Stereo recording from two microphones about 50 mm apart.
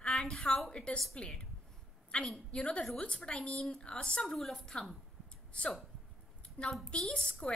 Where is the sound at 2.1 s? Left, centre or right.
Left.